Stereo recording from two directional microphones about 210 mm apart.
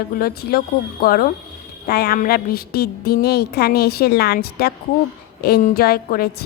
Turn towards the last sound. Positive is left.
turn(degrees=45)  # may be behind; listen again after turning